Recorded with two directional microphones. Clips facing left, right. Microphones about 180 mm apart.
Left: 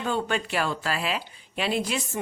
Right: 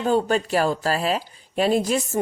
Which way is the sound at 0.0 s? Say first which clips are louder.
Right 7 dB; 40° right (ahead or behind).